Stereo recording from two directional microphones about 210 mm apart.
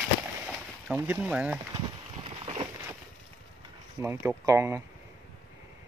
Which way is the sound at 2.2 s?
25° right (ahead or behind).